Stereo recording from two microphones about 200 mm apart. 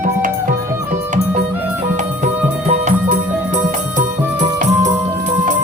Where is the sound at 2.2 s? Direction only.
35° right (ahead or behind).